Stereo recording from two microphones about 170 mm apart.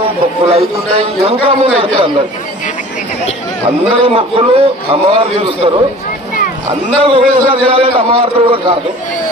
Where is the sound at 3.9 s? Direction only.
35° right (ahead or behind).